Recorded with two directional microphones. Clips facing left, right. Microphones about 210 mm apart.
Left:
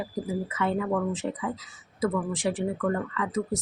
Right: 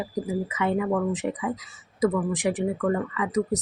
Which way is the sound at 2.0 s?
15° right (ahead or behind).